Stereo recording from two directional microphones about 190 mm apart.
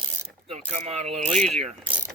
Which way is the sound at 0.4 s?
35° right (ahead or behind).